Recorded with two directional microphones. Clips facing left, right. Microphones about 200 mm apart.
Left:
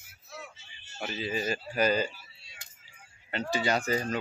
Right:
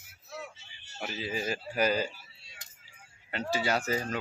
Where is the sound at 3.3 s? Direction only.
5° right (ahead or behind).